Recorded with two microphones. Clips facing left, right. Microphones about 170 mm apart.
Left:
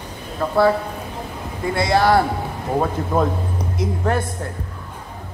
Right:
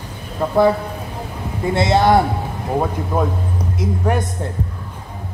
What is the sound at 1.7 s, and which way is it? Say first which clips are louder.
Speech: right 2 dB; 25° right (ahead or behind).